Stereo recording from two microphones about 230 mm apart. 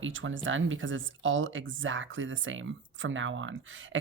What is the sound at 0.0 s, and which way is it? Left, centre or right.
Speech, right.